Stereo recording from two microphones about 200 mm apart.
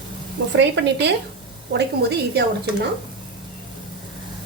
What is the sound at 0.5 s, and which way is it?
A woman's voice, 65° right (ahead or behind).